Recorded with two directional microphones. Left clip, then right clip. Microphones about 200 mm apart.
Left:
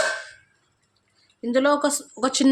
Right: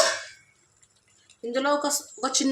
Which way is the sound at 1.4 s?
55° left (ahead or behind).